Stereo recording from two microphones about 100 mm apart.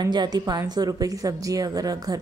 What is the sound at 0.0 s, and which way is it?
Speech, 45° right (ahead or behind).